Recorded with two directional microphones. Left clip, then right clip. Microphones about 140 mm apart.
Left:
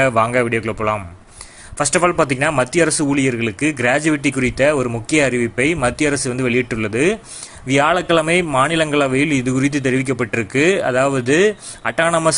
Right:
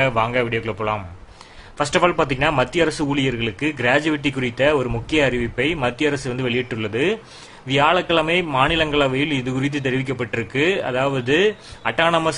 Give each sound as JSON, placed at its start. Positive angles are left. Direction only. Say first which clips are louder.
{"t": 0.0, "sound": "a man's voice", "louder": "left 4 dB", "side_deg": 40}